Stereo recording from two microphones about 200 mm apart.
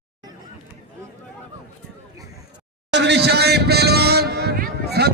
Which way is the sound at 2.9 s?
60° right (ahead or behind).